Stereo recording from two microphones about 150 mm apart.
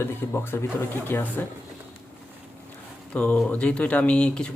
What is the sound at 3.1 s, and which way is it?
Speech, 10° left (ahead or behind).